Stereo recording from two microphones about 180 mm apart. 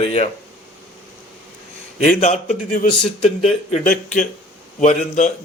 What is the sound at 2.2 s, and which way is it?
Speech, 40° left (ahead or behind).